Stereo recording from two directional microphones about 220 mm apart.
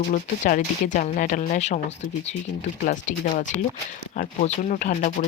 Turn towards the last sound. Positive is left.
turn(degrees=35)  # may be behind; listen again after turning